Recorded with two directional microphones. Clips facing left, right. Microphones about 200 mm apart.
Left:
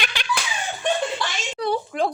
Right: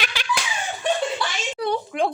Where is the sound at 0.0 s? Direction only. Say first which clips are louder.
Even; 5° right (ahead or behind).